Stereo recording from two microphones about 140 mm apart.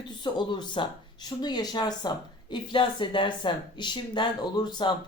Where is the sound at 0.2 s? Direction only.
35° left (ahead or behind).